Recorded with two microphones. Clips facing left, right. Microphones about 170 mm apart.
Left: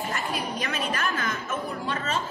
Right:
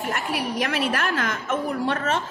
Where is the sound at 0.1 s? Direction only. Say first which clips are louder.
Right 4 dB; 75° right (ahead or behind).